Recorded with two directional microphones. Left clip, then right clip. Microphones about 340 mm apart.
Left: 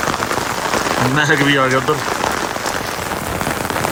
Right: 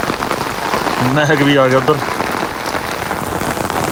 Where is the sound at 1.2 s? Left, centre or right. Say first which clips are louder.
Right 3 dB; centre.